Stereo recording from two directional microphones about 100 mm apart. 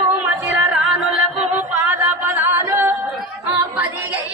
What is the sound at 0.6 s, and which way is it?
Music, centre (ahead or behind).